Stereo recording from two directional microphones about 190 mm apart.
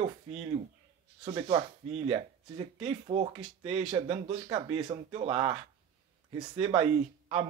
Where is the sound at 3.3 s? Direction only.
5° right (ahead or behind).